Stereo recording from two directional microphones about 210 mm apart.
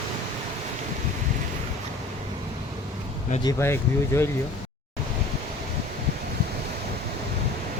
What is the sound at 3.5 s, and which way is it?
Speech, 10° left (ahead or behind).